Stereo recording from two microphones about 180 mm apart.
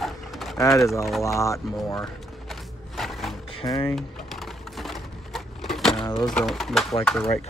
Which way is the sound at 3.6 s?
20° left (ahead or behind).